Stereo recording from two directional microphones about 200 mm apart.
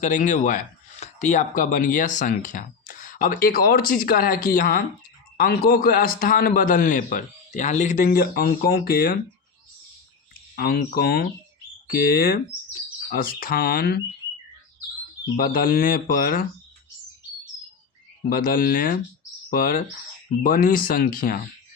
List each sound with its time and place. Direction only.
0.0 s a man's voice: 40° left (ahead or behind)
10.5 s a man's voice: 50° left (ahead or behind)
15.4 s a man's voice: 45° left (ahead or behind)
18.3 s a man's voice: 45° left (ahead or behind)